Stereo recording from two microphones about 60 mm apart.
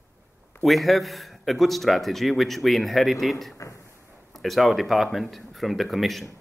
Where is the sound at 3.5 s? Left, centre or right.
Left.